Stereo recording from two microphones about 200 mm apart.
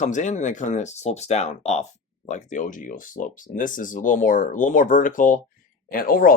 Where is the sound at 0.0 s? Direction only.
35° left (ahead or behind).